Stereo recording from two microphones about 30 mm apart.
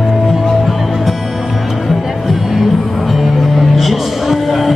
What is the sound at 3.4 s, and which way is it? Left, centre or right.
Music, centre.